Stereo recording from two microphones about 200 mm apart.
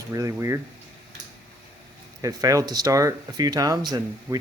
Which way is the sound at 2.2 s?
15° right (ahead or behind).